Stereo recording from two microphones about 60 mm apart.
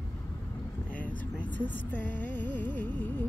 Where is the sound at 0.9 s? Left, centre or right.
Left.